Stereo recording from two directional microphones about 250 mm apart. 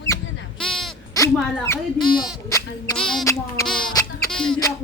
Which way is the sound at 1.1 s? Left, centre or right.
Centre.